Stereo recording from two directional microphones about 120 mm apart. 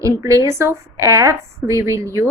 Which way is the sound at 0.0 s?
25° right (ahead or behind).